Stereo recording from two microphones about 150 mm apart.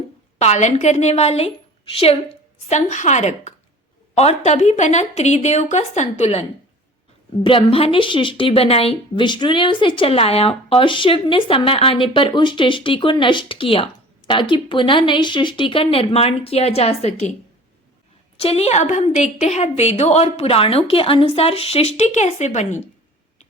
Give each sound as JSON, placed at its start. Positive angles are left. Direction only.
{"t": 0.3, "sound": "a woman's voice", "side_deg": 50}
{"t": 7.4, "sound": "a woman's voice", "side_deg": 35}
{"t": 18.4, "sound": "a woman's voice", "side_deg": 45}